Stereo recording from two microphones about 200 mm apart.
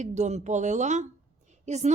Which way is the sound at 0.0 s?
35° right (ahead or behind).